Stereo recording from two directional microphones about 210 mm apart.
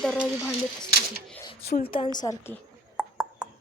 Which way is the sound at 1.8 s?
25° left (ahead or behind).